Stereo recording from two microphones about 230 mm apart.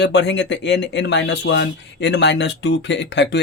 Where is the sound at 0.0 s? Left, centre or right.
Left.